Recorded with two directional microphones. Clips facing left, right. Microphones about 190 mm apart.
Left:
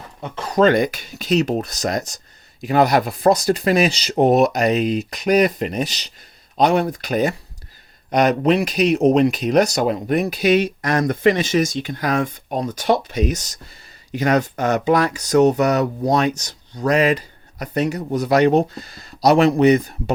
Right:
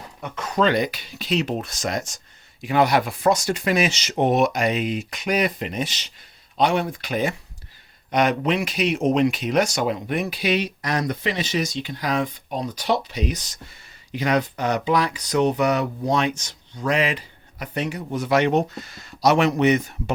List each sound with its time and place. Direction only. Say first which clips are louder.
0.2 s speech: left 4 dB; 30° left (ahead or behind)
0.6 s speech: left 5 dB; 50° left (ahead or behind)